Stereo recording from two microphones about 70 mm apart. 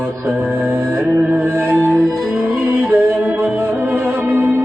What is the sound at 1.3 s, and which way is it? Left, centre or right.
Music, right.